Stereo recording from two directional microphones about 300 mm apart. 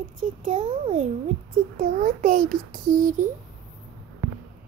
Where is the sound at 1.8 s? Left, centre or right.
Right.